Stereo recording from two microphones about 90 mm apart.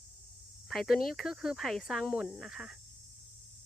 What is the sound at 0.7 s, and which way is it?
Speech, centre (ahead or behind).